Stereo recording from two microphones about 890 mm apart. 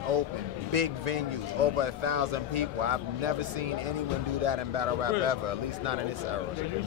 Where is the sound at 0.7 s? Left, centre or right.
Right.